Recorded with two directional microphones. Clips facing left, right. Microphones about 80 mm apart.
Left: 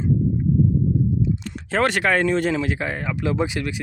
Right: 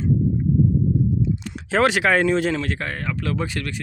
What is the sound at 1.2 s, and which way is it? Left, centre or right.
Speech, centre.